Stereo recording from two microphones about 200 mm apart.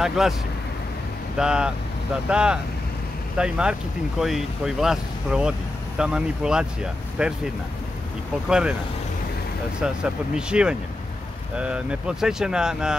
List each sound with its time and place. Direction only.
0.2 s speech: centre (ahead or behind)
1.4 s speech: 5° right (ahead or behind)
8.5 s speech: 5° right (ahead or behind)
9.8 s speech: 5° right (ahead or behind)